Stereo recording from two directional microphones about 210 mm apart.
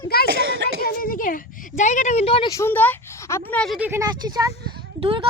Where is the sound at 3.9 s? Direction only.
15° right (ahead or behind).